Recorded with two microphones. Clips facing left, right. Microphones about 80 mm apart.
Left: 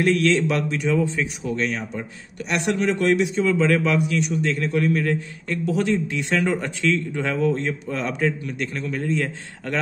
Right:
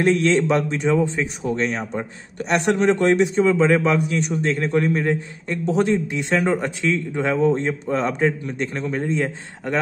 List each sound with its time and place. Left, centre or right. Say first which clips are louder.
0.0 s a man's voice: right 2 dB; right